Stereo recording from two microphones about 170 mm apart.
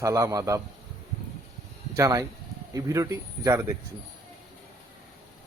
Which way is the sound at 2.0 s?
20° right (ahead or behind).